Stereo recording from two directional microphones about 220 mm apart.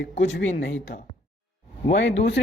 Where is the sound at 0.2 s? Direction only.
55° left (ahead or behind).